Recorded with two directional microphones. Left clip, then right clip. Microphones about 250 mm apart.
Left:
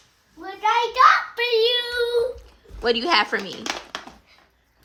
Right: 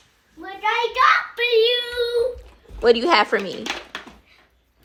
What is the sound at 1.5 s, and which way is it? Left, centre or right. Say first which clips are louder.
Child singing: right 3 dB; left.